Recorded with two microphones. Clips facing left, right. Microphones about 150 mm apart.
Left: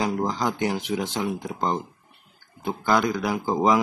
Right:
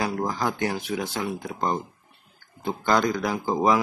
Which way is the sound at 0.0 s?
20° left (ahead or behind).